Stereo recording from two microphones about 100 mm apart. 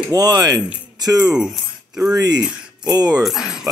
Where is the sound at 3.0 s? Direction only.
5° right (ahead or behind).